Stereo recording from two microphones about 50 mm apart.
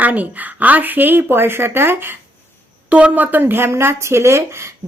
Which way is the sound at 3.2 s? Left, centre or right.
Right.